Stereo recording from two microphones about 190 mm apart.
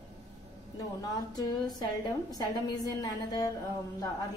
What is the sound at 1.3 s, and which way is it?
A woman's voice, 20° left (ahead or behind).